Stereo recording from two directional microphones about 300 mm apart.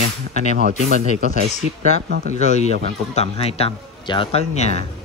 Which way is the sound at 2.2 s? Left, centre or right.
Left.